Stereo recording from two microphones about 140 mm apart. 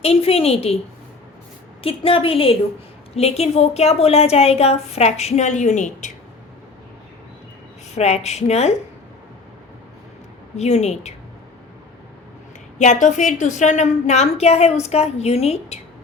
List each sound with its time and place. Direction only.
0.0 s a woman's voice: 45° left (ahead or behind)
1.8 s a woman's voice: 40° left (ahead or behind); by 6.1 s 60° left (ahead or behind)
7.9 s a woman's voice: 50° left (ahead or behind)
10.6 s a woman's voice: 50° left (ahead or behind)
12.8 s a woman's voice: 60° left (ahead or behind)